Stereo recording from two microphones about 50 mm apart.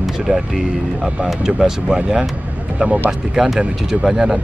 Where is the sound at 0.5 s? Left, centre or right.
Centre.